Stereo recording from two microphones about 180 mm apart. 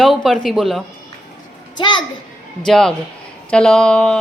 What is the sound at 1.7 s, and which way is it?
Speech, 25° left (ahead or behind).